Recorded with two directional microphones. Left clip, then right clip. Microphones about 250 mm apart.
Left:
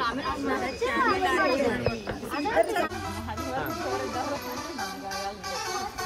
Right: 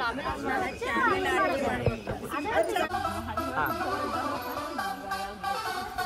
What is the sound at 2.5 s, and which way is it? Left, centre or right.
Snake, centre.